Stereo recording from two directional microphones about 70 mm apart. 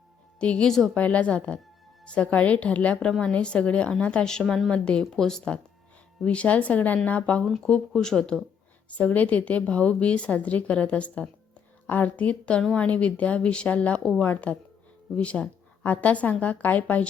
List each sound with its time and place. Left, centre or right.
0.3 s a woman's voice: centre
9.0 s a woman's voice: centre